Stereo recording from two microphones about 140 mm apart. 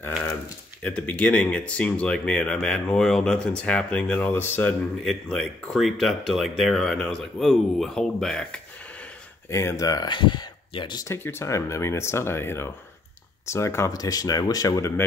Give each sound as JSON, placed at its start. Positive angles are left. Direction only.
{"t": 0.8, "sound": "speech", "side_deg": 10}
{"t": 5.0, "sound": "speech", "side_deg": 5}
{"t": 9.5, "sound": "speech", "side_deg": 20}
{"t": 11.1, "sound": "speech", "side_deg": 20}